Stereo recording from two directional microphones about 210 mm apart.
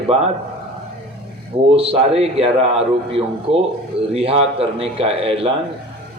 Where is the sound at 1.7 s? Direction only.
30° right (ahead or behind).